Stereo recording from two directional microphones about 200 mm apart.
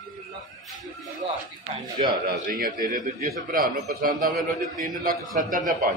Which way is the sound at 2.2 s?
45° right (ahead or behind).